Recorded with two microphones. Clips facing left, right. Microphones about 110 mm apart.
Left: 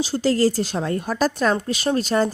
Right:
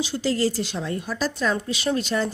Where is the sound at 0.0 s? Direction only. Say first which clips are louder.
Left 4 dB; 40° left (ahead or behind).